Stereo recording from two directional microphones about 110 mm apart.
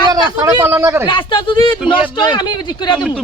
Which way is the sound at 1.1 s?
50° left (ahead or behind).